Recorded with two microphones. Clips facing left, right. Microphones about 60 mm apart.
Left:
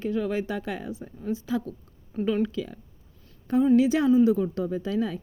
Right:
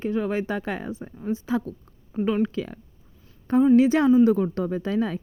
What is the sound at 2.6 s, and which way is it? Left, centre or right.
Speech, right.